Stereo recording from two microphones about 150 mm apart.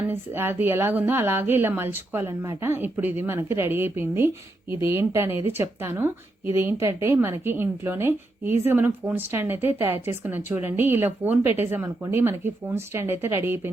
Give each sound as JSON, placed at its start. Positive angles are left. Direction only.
{"t": 0.1, "sound": "a woman's voice", "side_deg": -15}